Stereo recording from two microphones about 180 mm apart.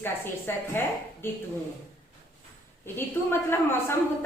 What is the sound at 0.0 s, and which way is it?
Speech, 10° left (ahead or behind).